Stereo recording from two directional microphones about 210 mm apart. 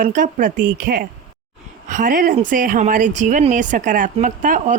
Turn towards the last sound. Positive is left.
turn(degrees=-40)  # may be behind; listen again after turning